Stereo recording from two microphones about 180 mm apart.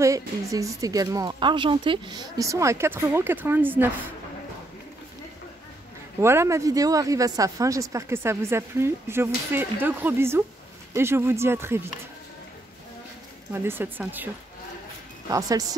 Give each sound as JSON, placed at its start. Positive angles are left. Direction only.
{"t": 0.0, "sound": "speech", "side_deg": -15}
{"t": 6.1, "sound": "speech", "side_deg": -15}
{"t": 13.5, "sound": "speech", "side_deg": -10}